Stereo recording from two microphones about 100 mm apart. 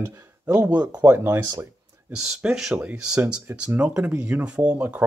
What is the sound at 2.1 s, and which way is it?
Speech, 5° right (ahead or behind).